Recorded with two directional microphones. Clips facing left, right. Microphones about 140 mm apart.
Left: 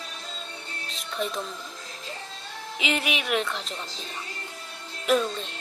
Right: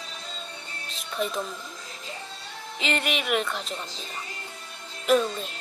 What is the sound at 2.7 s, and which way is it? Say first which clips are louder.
A woman's voice: even; 5° left (ahead or behind).